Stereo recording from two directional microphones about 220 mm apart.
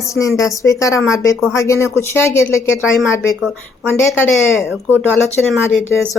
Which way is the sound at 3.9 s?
10° left (ahead or behind).